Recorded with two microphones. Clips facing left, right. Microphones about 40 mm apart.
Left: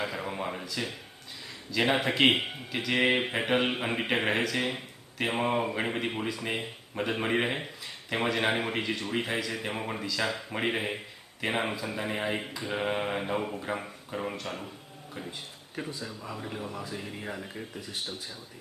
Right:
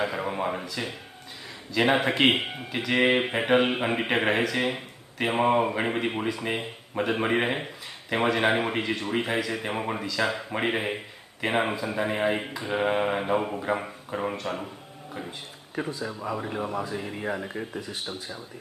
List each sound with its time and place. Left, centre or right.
0.0 s speech: centre
16.0 s speech: right
16.9 s speech: centre